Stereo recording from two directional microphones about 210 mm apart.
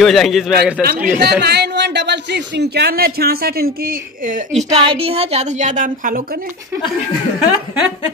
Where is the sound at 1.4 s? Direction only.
55° right (ahead or behind).